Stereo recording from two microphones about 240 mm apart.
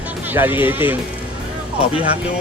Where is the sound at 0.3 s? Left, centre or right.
Centre.